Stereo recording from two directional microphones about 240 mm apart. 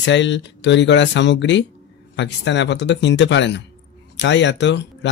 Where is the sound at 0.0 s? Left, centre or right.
Left.